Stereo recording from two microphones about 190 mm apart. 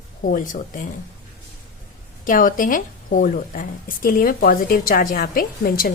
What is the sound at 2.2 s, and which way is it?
A woman's voice, 45° left (ahead or behind).